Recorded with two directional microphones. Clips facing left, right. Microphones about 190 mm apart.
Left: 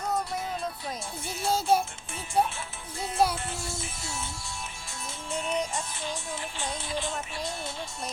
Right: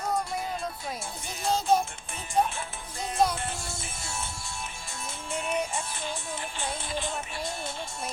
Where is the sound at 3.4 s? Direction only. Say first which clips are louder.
Even; 50° right (ahead or behind).